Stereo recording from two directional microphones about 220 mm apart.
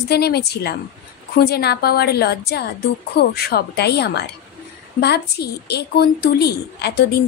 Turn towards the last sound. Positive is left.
turn(degrees=45)  # may be behind; listen again after turning